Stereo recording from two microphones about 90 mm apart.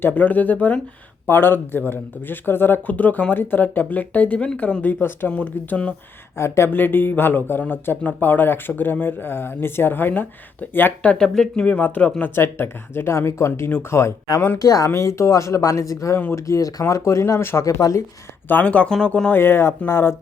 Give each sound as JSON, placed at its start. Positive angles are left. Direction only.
{"t": 0.0, "sound": "speech", "side_deg": 20}
{"t": 6.3, "sound": "speech", "side_deg": 30}
{"t": 12.3, "sound": "speech", "side_deg": 25}
{"t": 14.6, "sound": "speech", "side_deg": 40}
{"t": 16.1, "sound": "speech", "side_deg": 25}
{"t": 16.5, "sound": "speech", "side_deg": 40}
{"t": 18.4, "sound": "speech", "side_deg": 20}
{"t": 19.4, "sound": "speech", "side_deg": 25}